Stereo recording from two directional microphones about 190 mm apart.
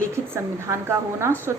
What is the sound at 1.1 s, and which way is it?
Speech, 15° right (ahead or behind).